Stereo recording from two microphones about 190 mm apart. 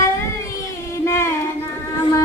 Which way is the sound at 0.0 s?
15° left (ahead or behind).